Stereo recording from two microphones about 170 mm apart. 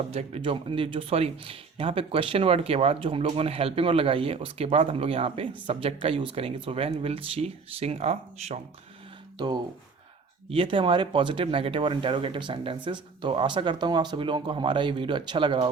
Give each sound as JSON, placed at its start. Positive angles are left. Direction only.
{"t": 0.1, "sound": "speech", "side_deg": -35}
{"t": 10.5, "sound": "speech", "side_deg": -30}